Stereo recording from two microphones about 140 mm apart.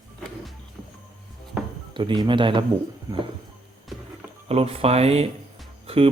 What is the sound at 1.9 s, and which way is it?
Speech, 35° right (ahead or behind).